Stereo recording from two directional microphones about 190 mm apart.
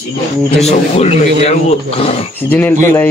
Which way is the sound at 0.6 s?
35° left (ahead or behind).